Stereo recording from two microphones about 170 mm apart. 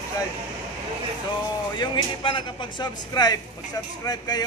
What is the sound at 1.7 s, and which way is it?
Speech, 30° left (ahead or behind).